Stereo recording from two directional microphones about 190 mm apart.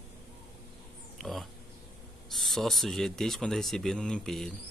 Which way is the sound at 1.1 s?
Centre (ahead or behind).